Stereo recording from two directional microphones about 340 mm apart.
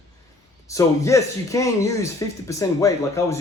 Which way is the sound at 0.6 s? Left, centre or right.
Centre.